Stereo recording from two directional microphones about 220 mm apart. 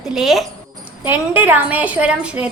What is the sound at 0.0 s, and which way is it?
A woman's voice, centre (ahead or behind).